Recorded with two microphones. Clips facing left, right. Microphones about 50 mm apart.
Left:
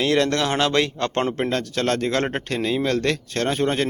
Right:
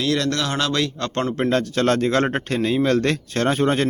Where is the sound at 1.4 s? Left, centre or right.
Centre.